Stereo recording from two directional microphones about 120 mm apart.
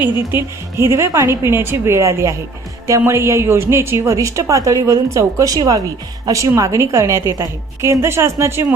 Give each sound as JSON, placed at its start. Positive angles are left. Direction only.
{"t": 0.0, "sound": "a woman's voice", "side_deg": -20}